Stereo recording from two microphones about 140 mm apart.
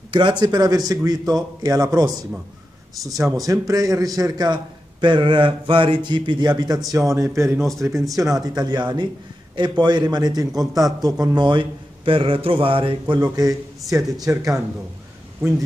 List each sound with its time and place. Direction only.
0.1 s a man's voice: 30° right (ahead or behind)
3.2 s speech: centre (ahead or behind)
3.4 s a man's voice: 25° right (ahead or behind)
13.2 s a man's voice: 25° right (ahead or behind)
14.1 s speech: 5° right (ahead or behind)